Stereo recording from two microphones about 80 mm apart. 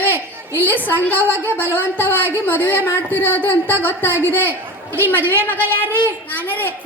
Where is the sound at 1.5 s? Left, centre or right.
Left.